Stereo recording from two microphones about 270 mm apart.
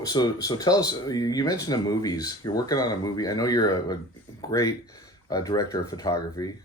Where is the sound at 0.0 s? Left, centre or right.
Centre.